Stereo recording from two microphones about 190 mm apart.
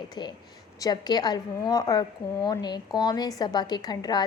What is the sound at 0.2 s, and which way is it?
A woman's voice, 25° left (ahead or behind).